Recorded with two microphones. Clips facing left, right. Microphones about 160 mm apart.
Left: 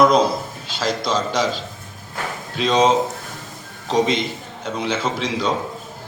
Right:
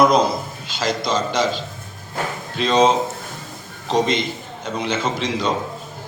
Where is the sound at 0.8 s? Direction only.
5° left (ahead or behind).